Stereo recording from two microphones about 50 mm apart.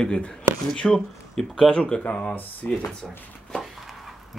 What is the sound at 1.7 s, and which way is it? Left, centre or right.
Speech, left.